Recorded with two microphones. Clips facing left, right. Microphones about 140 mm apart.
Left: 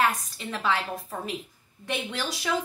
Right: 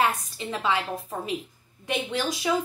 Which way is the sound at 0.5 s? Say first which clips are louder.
Right 1 dB; 15° right (ahead or behind).